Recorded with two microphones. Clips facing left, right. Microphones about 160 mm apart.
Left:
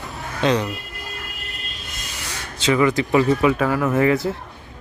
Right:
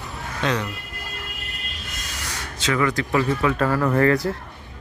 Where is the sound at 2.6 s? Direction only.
20° left (ahead or behind).